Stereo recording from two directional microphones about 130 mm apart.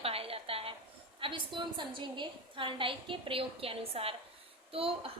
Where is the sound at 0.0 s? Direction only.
45° right (ahead or behind).